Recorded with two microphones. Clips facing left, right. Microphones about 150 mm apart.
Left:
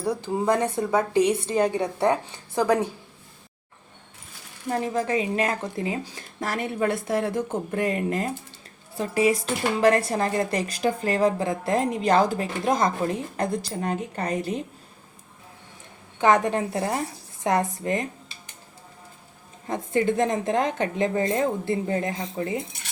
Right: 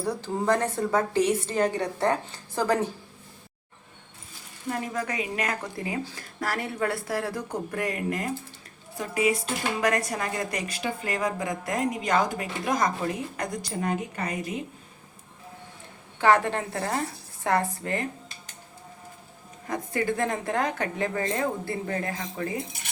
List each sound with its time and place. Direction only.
0.0 s a woman's voice: 15° left (ahead or behind)
4.9 s a woman's voice: 25° left (ahead or behind)
16.2 s a woman's voice: 20° left (ahead or behind)
19.6 s a woman's voice: 25° left (ahead or behind)